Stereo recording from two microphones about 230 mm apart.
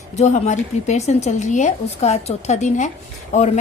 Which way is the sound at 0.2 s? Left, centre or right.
Left.